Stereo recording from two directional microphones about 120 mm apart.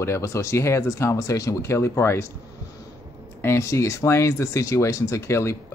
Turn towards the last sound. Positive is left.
turn(degrees=25)  # may be behind; listen again after turning